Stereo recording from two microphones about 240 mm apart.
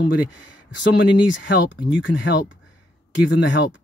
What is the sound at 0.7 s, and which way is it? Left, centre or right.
Speech, left.